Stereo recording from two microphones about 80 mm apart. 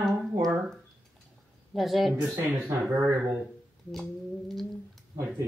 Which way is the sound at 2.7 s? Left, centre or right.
Right.